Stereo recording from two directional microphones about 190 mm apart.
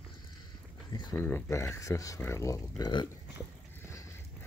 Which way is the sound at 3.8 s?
15° left (ahead or behind).